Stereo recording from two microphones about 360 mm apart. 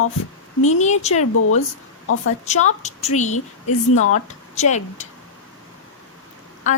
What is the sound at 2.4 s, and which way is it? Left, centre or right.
Speech, centre.